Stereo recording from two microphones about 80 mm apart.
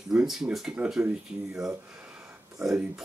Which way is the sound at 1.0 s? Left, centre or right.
Centre.